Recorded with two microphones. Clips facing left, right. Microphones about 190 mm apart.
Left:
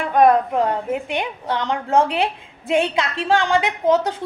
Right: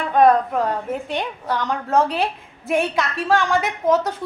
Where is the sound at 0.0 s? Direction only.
10° left (ahead or behind).